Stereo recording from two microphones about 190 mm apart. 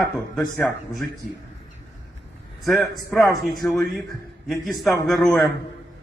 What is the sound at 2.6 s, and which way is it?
A man's voice, centre (ahead or behind).